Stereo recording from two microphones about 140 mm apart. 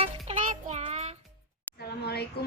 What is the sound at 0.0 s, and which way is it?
Music, 50° right (ahead or behind).